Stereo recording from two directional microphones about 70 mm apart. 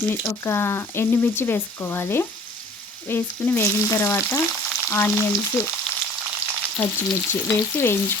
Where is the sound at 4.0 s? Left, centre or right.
Left.